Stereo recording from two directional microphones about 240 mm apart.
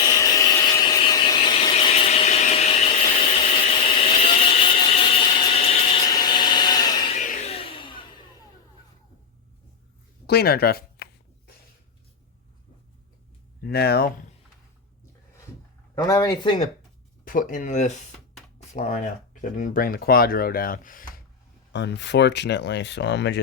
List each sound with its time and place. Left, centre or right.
0.0 s a sound: centre
7.2 s vehicle: left
10.2 s a sound: left
13.6 s speech: left
16.0 s speech: centre
17.2 s speech: left
21.7 s speech: left